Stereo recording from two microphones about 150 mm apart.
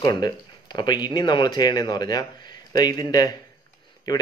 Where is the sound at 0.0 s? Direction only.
30° left (ahead or behind).